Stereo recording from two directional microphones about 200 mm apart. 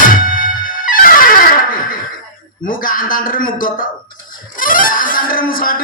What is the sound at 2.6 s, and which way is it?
Speech, 45° left (ahead or behind).